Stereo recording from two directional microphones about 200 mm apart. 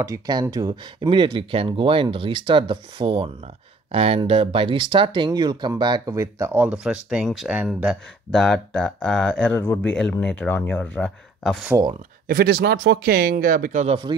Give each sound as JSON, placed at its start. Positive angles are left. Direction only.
{"t": 0.0, "sound": "speech", "side_deg": -20}
{"t": 12.3, "sound": "speech", "side_deg": -50}